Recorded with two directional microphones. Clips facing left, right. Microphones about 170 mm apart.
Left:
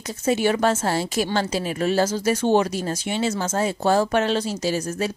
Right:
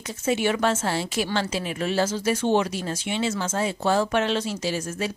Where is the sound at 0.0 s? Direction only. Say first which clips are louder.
Left 3 dB; 40° left (ahead or behind).